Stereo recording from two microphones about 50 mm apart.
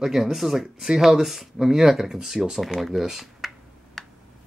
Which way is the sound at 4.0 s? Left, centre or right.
Centre.